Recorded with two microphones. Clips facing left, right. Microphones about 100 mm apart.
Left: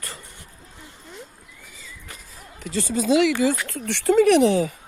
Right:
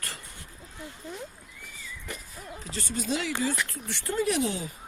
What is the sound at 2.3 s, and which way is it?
Speech, 85° left.